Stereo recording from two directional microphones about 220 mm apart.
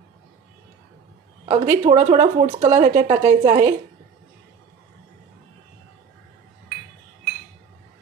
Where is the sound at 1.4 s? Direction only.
30° right (ahead or behind).